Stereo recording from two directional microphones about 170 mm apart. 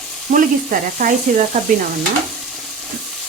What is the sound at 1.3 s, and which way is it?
Speech, 50° right (ahead or behind).